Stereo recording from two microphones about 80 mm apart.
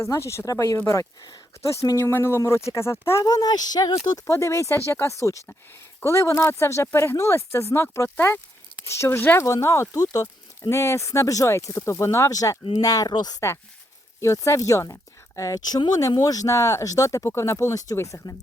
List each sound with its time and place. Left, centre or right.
0.0 s speech: left
1.8 s speech: left
3.2 s speech: left
4.3 s speech: left
14.2 s speech: left